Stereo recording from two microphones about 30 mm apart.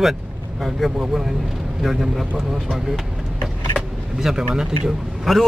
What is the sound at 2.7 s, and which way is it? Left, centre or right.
Vehicle, centre.